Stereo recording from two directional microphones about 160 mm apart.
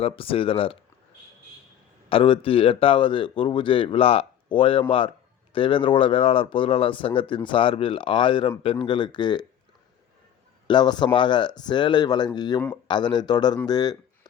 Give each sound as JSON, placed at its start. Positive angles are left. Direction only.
{"t": 0.0, "sound": "speech", "side_deg": 35}
{"t": 2.0, "sound": "speech", "side_deg": 35}
{"t": 10.7, "sound": "speech", "side_deg": 25}